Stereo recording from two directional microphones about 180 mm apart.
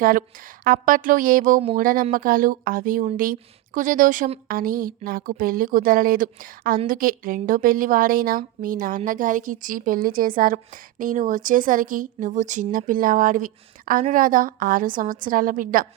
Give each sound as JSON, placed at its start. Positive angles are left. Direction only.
{"t": 0.0, "sound": "a woman's voice", "side_deg": -50}